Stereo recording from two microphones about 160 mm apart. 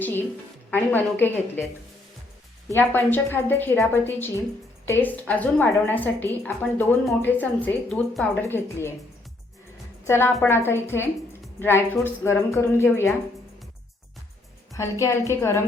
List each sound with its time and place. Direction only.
0.0 s a woman's voice: 10° left (ahead or behind)
2.7 s a woman's voice: 15° left (ahead or behind)
10.0 s a woman's voice: 15° left (ahead or behind)
14.7 s a woman's voice: 20° left (ahead or behind)